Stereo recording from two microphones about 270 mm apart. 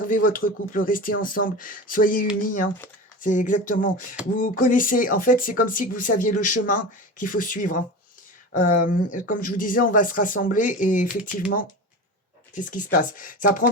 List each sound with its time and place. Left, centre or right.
0.1 s speech: left